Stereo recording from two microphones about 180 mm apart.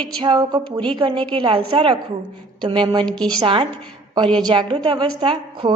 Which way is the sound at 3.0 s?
5° left (ahead or behind).